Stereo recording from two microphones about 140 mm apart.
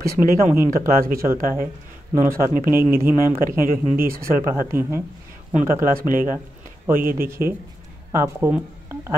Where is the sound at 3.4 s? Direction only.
90° right.